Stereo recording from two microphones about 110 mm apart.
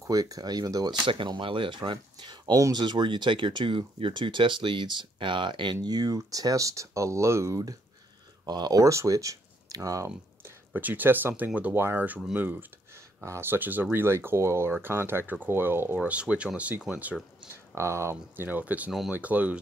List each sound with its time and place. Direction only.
0.0 s speech: 30° right (ahead or behind)
1.1 s speech: 50° right (ahead or behind); by 7.7 s 25° right (ahead or behind)
8.5 s speech: 40° right (ahead or behind); by 17.2 s 10° right (ahead or behind)
17.7 s speech: 25° right (ahead or behind)